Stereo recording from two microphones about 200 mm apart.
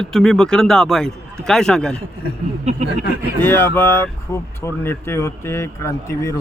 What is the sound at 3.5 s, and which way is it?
Speech, 10° left (ahead or behind).